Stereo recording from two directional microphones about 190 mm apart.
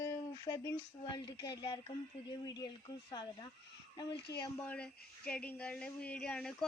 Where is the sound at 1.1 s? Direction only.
20° left (ahead or behind).